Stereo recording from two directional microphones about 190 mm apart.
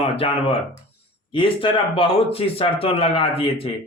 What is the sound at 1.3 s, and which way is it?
Speech, 25° left (ahead or behind).